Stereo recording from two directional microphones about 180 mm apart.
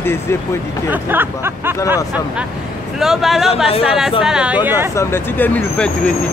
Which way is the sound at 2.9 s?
Centre (ahead or behind).